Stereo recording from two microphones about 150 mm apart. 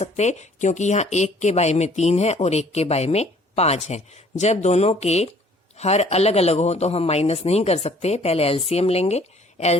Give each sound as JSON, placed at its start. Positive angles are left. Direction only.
{"t": 0.0, "sound": "speech", "side_deg": 50}